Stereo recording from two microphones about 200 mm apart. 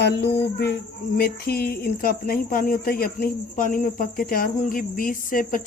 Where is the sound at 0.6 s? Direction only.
50° left (ahead or behind).